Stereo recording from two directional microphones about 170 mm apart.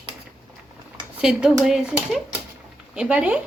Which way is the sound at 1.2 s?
5° right (ahead or behind).